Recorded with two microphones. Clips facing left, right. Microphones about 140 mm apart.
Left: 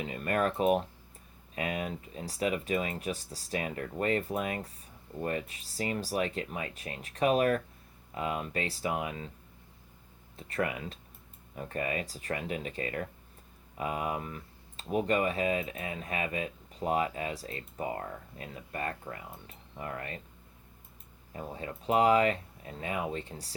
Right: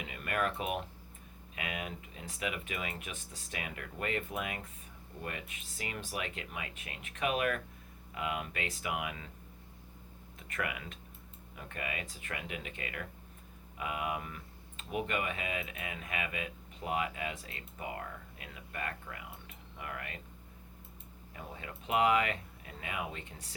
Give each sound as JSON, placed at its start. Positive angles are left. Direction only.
{"t": 0.0, "sound": "speech", "side_deg": 35}
{"t": 10.3, "sound": "speech", "side_deg": 35}
{"t": 21.3, "sound": "speech", "side_deg": 35}